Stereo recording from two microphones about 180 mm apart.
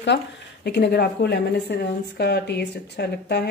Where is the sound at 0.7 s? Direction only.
60° left (ahead or behind).